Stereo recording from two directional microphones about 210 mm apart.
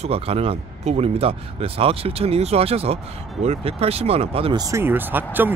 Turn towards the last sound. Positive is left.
turn(degrees=-10)  # may be behind; listen again after turning